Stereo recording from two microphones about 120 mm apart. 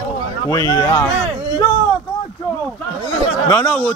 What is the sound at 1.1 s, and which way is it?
Speech, 70° right (ahead or behind).